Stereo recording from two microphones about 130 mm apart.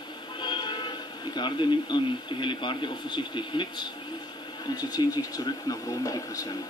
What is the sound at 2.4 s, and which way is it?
Speech, 40° left (ahead or behind).